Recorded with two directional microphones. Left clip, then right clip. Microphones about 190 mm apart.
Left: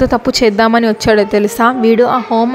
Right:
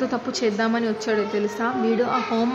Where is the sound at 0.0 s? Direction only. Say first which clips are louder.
Left 13 dB; 45° left (ahead or behind).